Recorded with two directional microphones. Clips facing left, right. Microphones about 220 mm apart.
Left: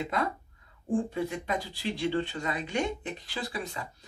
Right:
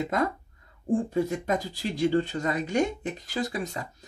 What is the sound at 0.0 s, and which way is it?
Speech, 45° right (ahead or behind).